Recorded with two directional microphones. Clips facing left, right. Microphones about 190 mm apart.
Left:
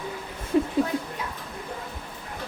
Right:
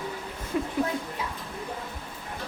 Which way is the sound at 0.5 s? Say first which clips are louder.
Left 6 dB; 25° left (ahead or behind).